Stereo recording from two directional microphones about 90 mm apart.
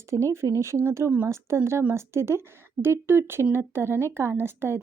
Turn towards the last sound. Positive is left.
turn(degrees=-25)  # may be behind; listen again after turning